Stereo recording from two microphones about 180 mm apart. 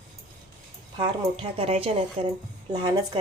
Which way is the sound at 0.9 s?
30° right (ahead or behind).